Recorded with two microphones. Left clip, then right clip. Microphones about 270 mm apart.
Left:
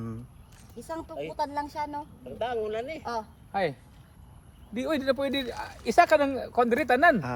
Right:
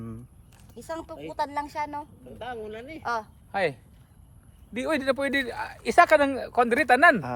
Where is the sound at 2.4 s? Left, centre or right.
Left.